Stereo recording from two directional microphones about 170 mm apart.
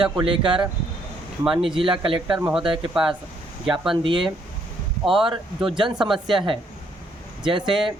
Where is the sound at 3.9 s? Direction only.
30° right (ahead or behind).